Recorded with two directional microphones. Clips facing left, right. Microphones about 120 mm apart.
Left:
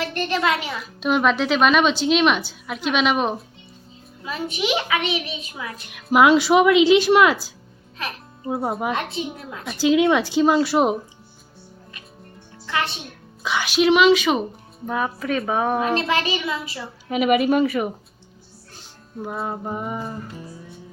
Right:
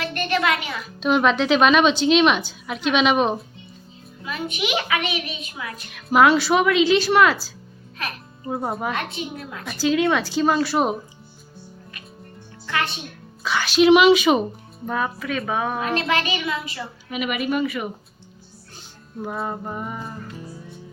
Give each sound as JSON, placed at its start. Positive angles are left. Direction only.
{"t": 0.1, "sound": "a woman's voice", "side_deg": 30}
{"t": 0.7, "sound": "a woman's voice", "side_deg": 5}
{"t": 4.3, "sound": "a woman's voice", "side_deg": 30}
{"t": 8.0, "sound": "music", "side_deg": 10}
{"t": 8.8, "sound": "a woman's voice", "side_deg": 20}
{"t": 12.7, "sound": "a woman's voice", "side_deg": 30}
{"t": 13.4, "sound": "a sound", "side_deg": 15}
{"t": 13.8, "sound": "speech", "side_deg": -10}
{"t": 14.8, "sound": "a sound", "side_deg": 10}
{"t": 15.2, "sound": "a woman's voice", "side_deg": 30}
{"t": 19.2, "sound": "a woman's voice", "side_deg": 5}
{"t": 19.6, "sound": "a sound", "side_deg": 15}